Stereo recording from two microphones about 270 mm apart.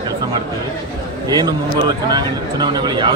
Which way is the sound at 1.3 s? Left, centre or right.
Centre.